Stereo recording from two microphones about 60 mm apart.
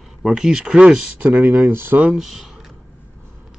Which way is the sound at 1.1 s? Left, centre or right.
Right.